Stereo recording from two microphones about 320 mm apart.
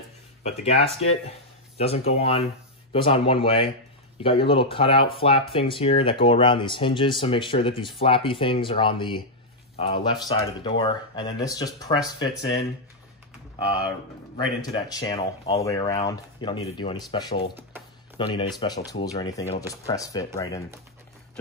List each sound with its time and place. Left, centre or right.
0.5 s speech: centre
14.3 s speech: centre